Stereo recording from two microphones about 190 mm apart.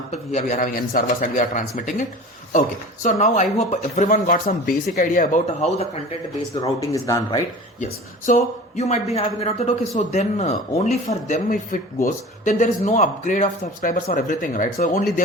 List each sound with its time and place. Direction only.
0.1 s speech: 35° left (ahead or behind)
6.9 s speech: 15° left (ahead or behind)
8.3 s speech: 35° left (ahead or behind)